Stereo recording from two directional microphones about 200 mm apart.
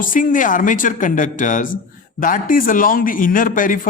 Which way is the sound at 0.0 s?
45° left (ahead or behind).